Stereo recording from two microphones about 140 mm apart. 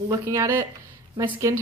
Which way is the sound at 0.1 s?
20° right (ahead or behind).